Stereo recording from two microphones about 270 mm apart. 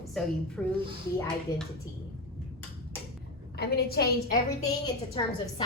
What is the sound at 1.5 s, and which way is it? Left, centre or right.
Speech, centre.